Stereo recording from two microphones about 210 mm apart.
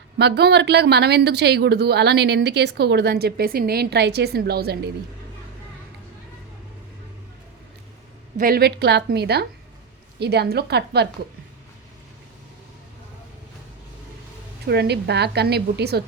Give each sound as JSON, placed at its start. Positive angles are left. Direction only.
{"t": 0.2, "sound": "a woman's voice", "side_deg": -50}
{"t": 8.4, "sound": "a woman's voice", "side_deg": -45}
{"t": 14.7, "sound": "a woman's voice", "side_deg": -50}